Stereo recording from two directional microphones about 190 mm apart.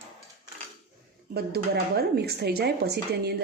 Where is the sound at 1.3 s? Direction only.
55° right (ahead or behind).